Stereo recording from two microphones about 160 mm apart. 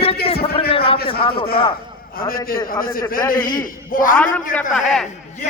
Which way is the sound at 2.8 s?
60° left (ahead or behind).